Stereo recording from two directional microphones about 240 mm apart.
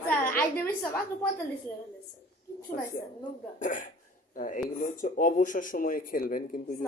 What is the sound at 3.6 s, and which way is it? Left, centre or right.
Speech, left.